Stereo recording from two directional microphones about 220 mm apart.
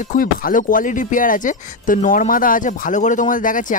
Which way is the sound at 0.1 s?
40° left (ahead or behind).